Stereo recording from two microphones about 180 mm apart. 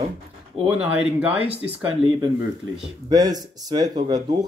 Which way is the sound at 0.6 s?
10° right (ahead or behind).